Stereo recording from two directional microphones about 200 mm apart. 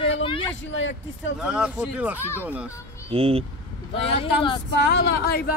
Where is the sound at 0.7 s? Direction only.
70° left (ahead or behind).